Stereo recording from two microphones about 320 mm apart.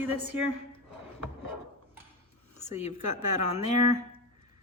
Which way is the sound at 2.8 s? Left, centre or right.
Right.